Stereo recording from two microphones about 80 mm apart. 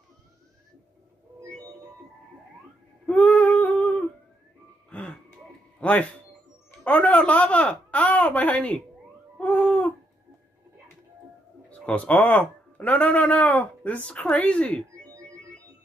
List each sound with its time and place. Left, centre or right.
3.1 s female singing: centre
3.7 s humming: centre
4.8 s a sound: centre
5.8 s music: centre
6.8 s speech: centre
9.4 s owl: centre
11.8 s a man's voice: centre